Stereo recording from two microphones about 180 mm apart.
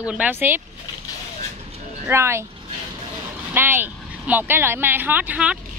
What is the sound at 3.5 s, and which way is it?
A woman's voice, 10° right (ahead or behind).